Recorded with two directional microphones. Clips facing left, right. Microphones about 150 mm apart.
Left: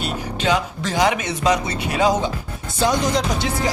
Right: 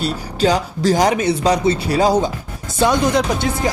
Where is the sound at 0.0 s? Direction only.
35° right (ahead or behind).